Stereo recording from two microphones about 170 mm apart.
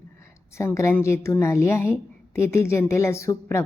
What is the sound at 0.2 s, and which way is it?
A woman's voice, 15° left (ahead or behind).